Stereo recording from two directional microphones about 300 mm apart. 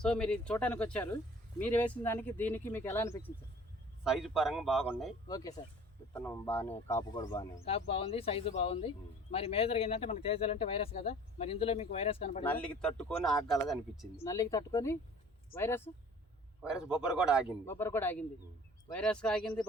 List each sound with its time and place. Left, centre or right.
0.0 s speech: centre
5.3 s speech: centre
12.5 s speech: centre
14.3 s speech: centre
16.6 s speech: centre
17.4 s speech: centre